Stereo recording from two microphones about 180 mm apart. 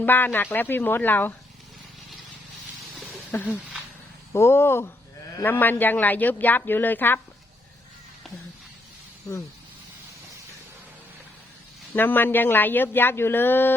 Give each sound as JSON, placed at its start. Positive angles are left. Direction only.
{"t": 0.0, "sound": "speech", "side_deg": 10}
{"t": 3.1, "sound": "a sound", "side_deg": 10}
{"t": 4.3, "sound": "speech", "side_deg": 15}
{"t": 11.9, "sound": "speech", "side_deg": 10}